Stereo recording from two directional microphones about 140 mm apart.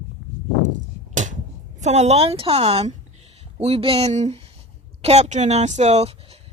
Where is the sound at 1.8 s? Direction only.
55° right (ahead or behind).